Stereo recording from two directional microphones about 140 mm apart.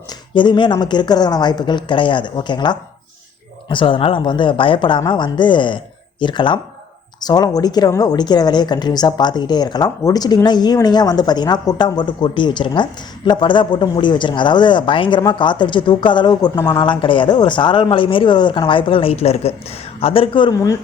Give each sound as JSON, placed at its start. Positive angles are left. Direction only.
{"t": 0.1, "sound": "a woman's voice", "side_deg": 35}